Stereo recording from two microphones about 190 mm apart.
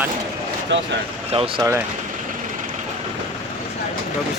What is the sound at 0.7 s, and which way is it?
Speech, 75° right (ahead or behind).